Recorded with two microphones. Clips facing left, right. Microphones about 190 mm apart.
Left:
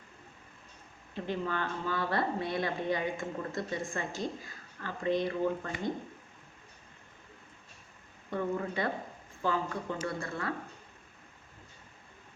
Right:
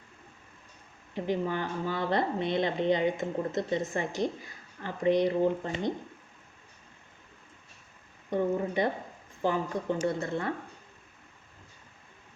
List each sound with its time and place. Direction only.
1.1 s speech: 15° right (ahead or behind)
8.3 s speech: 20° right (ahead or behind)